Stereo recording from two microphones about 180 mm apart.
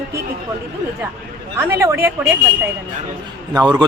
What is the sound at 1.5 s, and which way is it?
Speech, 15° right (ahead or behind).